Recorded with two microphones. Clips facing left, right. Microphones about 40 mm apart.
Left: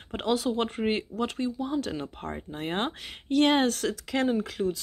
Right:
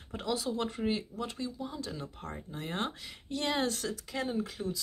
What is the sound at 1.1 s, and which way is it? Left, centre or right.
Speech, left.